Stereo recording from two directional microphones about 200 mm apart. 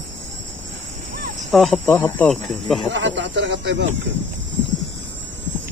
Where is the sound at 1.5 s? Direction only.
Centre (ahead or behind).